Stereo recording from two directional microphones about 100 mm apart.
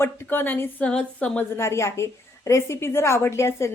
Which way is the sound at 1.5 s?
25° left (ahead or behind).